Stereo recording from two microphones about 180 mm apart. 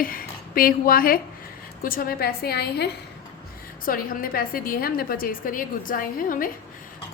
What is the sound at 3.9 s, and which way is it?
A woman's voice, 50° left (ahead or behind).